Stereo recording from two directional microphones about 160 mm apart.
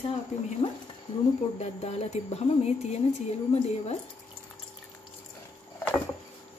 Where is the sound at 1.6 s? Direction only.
40° left (ahead or behind).